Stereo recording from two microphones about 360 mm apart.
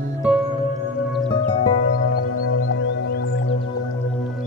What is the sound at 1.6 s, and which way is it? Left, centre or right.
Music, left.